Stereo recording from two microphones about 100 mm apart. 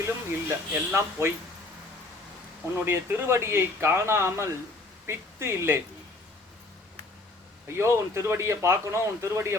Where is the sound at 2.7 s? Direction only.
25° right (ahead or behind).